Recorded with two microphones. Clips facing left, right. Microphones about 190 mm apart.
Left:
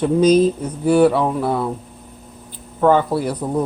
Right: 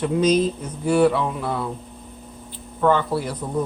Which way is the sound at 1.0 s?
40° left (ahead or behind).